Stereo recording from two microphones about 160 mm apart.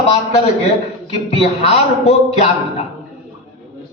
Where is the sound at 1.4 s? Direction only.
40° left (ahead or behind).